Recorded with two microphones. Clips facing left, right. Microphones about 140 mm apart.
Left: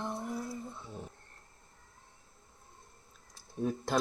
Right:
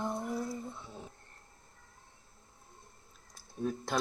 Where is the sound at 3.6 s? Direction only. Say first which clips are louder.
Left 2 dB; 5° left (ahead or behind).